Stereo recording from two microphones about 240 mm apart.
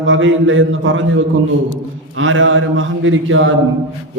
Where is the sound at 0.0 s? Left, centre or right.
Right.